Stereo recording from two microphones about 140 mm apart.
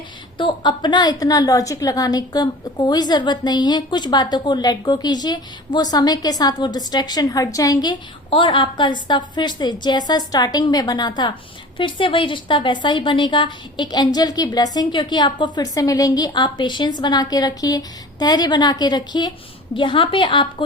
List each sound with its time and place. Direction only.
0.3 s a woman's voice: 35° left (ahead or behind)